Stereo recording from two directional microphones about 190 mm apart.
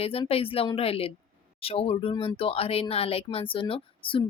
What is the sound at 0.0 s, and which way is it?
Speech, 30° left (ahead or behind).